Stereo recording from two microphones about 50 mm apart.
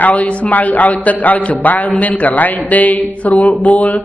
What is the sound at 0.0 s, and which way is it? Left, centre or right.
A man's voice, left.